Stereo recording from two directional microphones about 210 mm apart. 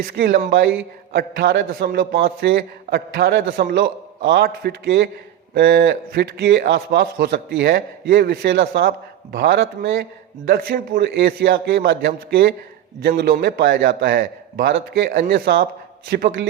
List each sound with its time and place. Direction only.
0.1 s a man's voice: 45° right (ahead or behind)